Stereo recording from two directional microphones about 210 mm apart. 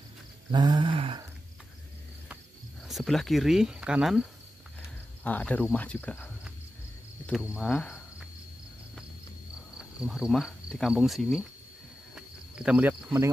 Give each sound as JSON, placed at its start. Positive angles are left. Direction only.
{"t": 0.5, "sound": "a sound", "side_deg": -20}
{"t": 2.9, "sound": "speech", "side_deg": 0}
{"t": 5.2, "sound": "speech", "side_deg": 10}
{"t": 7.2, "sound": "speech", "side_deg": 0}
{"t": 7.7, "sound": "cricket", "side_deg": 5}
{"t": 9.8, "sound": "speech", "side_deg": 0}
{"t": 12.2, "sound": "cricket", "side_deg": -5}